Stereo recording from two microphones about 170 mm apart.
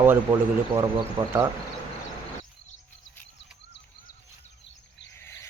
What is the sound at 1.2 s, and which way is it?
Speech, 25° right (ahead or behind).